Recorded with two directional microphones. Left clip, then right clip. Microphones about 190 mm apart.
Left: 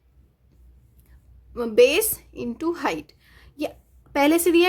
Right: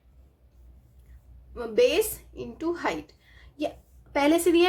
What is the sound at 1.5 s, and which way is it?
A woman's voice, 40° left (ahead or behind).